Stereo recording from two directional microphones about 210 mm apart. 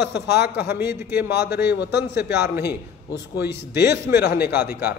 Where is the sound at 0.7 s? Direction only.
50° left (ahead or behind).